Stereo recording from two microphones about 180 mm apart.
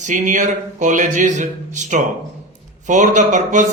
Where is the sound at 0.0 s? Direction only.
45° right (ahead or behind).